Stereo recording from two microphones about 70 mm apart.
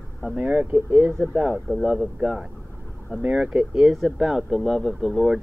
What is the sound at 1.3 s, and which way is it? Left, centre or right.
Speech, centre.